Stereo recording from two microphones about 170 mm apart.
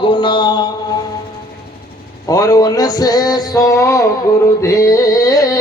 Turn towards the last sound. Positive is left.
turn(degrees=20)  # may be behind; listen again after turning